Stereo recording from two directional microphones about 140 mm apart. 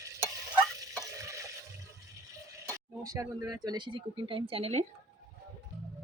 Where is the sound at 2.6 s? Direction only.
25° right (ahead or behind); by 4.9 s 50° right (ahead or behind).